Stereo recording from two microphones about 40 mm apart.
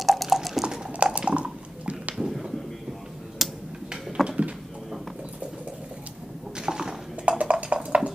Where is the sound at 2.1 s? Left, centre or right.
Centre.